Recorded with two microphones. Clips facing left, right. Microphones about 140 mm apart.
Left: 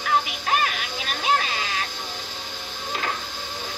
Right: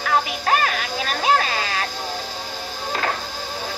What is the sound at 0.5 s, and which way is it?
Music, 40° right (ahead or behind).